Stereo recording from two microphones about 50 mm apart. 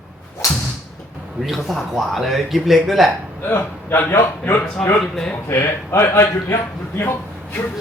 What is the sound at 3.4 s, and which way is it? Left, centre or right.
Speech, left.